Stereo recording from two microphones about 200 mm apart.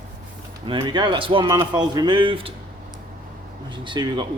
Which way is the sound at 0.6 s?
25° right (ahead or behind).